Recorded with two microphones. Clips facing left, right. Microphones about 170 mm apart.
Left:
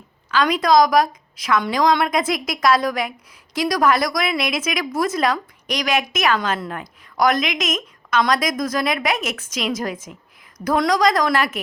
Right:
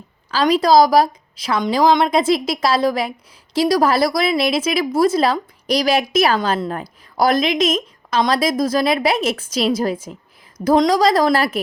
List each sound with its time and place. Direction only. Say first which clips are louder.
0.3 s a woman's voice: right 3 dB; 30° right (ahead or behind)